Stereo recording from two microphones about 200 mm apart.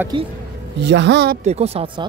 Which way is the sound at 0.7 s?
60° right (ahead or behind).